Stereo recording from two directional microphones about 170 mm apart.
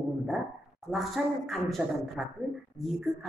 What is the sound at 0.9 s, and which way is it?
A woman's voice, centre (ahead or behind).